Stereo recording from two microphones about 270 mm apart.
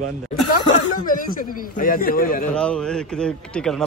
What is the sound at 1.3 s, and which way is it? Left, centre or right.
A man's voice, left.